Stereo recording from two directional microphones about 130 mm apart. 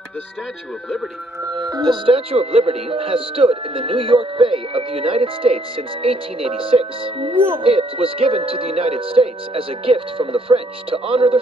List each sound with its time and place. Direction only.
1.5 s speech: 30° right (ahead or behind)